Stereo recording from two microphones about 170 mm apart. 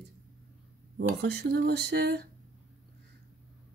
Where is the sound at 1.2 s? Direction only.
75° right (ahead or behind).